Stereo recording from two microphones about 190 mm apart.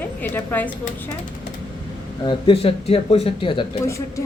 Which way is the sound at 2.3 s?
30° left (ahead or behind).